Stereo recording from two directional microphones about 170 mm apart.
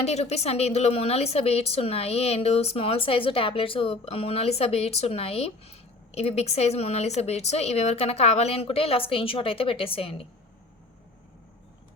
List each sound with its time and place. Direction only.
0.0 s speech: 40° left (ahead or behind)